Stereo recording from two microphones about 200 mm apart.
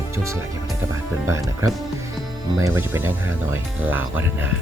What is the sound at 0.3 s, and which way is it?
Speech, 15° right (ahead or behind).